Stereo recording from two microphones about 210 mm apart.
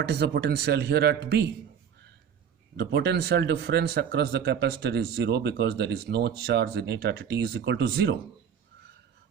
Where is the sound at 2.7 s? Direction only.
50° right (ahead or behind).